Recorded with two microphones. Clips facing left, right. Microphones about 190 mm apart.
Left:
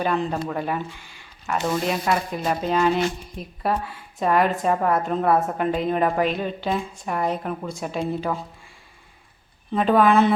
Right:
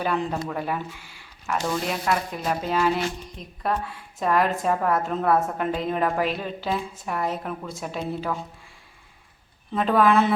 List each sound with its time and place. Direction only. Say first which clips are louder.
0.0 s speech: left 2 dB; 5° right (ahead or behind)
1.6 s speech: left 3 dB; 10° left (ahead or behind)
2.6 s a woman's voice: left 3 dB; 5° right (ahead or behind)
3.3 s a woman's voice: left 2 dB; 5° left (ahead or behind)
9.7 s a woman's voice: left 2 dB; centre (ahead or behind)